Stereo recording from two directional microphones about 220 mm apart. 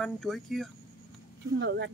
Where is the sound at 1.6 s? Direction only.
50° right (ahead or behind).